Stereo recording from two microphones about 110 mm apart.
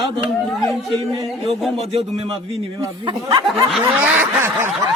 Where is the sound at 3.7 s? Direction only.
Centre (ahead or behind).